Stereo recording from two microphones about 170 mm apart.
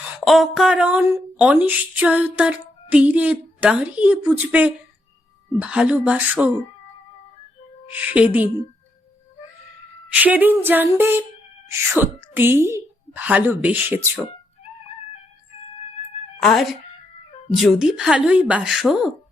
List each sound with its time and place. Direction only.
0.0 s speech: centre (ahead or behind)
7.9 s speech: 5° right (ahead or behind)
10.1 s speech: 10° right (ahead or behind)
16.4 s a woman's voice: centre (ahead or behind)